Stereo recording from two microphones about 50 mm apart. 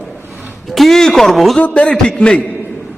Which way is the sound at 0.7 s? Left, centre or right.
Centre.